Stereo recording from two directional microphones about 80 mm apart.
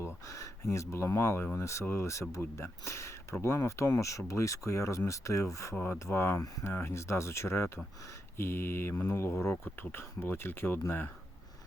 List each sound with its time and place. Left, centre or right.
0.0 s speech: left
5.7 s speech: left
6.1 s speech: left